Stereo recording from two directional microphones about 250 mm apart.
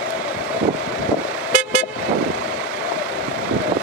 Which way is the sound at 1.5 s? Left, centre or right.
Centre.